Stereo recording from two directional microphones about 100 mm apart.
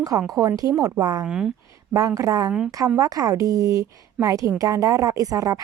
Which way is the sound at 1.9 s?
35° right (ahead or behind).